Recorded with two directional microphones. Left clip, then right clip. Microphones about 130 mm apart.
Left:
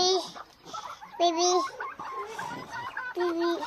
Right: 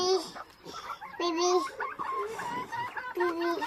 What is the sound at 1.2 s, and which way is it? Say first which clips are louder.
Speech: left 4 dB; 40° left (ahead or behind).